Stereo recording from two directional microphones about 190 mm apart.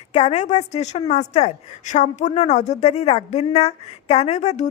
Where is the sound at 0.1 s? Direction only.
35° left (ahead or behind).